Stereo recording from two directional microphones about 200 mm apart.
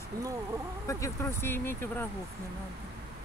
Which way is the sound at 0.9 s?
15° left (ahead or behind).